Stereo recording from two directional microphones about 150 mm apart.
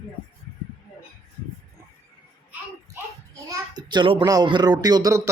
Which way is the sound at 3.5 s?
30° right (ahead or behind).